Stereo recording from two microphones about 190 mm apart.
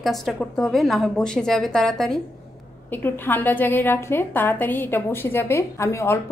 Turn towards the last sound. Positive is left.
turn(degrees=15)  # may be behind; listen again after turning